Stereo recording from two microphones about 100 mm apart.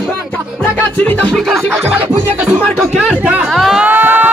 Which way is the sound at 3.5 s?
5° right (ahead or behind).